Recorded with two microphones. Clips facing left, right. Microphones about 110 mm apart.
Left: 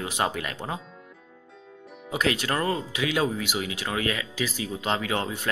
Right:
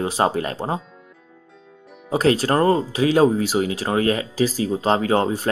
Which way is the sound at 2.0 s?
35° right (ahead or behind).